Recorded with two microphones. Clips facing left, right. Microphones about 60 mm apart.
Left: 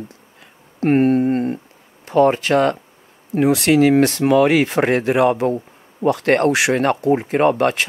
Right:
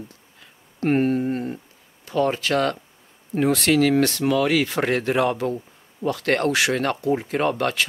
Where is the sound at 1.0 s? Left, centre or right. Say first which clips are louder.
Left 6 dB; left.